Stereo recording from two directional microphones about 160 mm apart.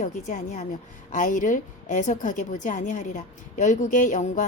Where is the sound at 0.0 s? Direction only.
50° left (ahead or behind).